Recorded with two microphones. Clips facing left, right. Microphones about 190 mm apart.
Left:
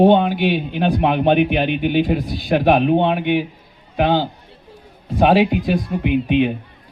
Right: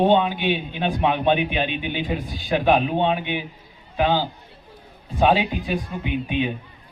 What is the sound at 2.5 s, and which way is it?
Speech, 65° left (ahead or behind).